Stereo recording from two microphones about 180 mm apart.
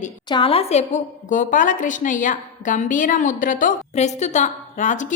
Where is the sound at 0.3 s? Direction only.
30° left (ahead or behind).